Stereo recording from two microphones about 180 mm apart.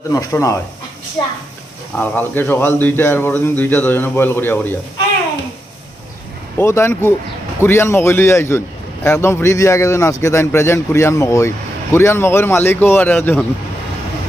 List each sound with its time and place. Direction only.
0.1 s a man's voice: 20° left (ahead or behind)
2.0 s a man's voice: 10° left (ahead or behind)
6.6 s a man's voice: 15° left (ahead or behind)